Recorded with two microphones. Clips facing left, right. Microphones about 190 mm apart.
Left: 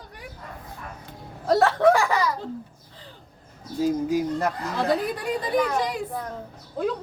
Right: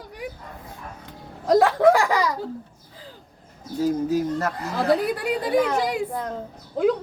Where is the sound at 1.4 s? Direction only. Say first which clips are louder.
Right 2 dB; 15° right (ahead or behind).